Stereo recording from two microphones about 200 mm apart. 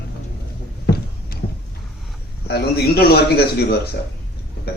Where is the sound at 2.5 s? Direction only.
55° left (ahead or behind).